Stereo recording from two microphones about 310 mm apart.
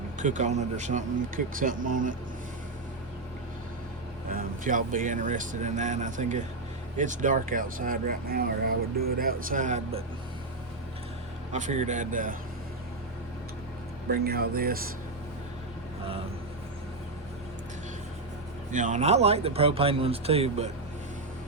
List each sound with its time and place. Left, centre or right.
0.2 s speech: right
4.3 s speech: right
11.5 s speech: right
14.1 s speech: right
18.7 s speech: right